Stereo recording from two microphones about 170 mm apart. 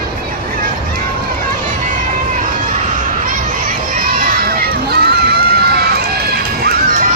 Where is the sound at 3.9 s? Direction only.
55° right (ahead or behind).